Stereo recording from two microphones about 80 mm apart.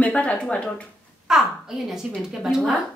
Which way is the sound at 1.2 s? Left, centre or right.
Centre.